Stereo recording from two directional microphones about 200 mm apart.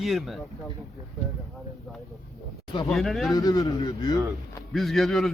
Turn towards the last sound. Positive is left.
turn(degrees=0)  # may be behind; listen again after turning